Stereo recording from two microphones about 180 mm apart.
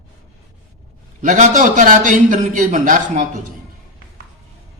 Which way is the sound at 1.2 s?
45° right (ahead or behind).